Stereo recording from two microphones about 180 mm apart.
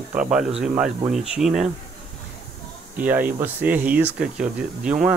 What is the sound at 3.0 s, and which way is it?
Speech, 10° right (ahead or behind).